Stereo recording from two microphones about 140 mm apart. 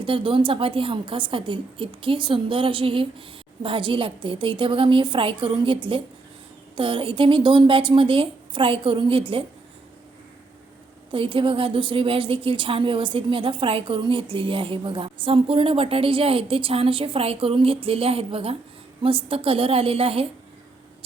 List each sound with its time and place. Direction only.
0.0 s a woman's voice: 40° right (ahead or behind)
11.1 s a woman's voice: 35° right (ahead or behind)